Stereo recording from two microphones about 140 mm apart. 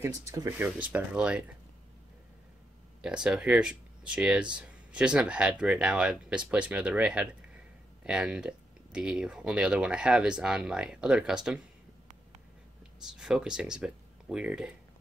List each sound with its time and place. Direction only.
0.0 s speech: 25° right (ahead or behind)
0.6 s speech: 10° right (ahead or behind)
3.0 s speech: 5° right (ahead or behind)
13.0 s speech: 5° right (ahead or behind)